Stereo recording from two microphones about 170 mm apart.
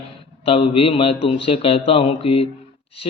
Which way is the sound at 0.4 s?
30° left (ahead or behind).